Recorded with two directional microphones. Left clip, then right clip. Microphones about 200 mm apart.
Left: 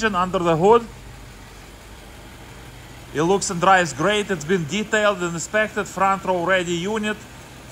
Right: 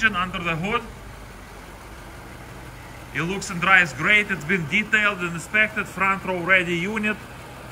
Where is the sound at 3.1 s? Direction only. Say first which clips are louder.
Left 7 dB; 15° left (ahead or behind).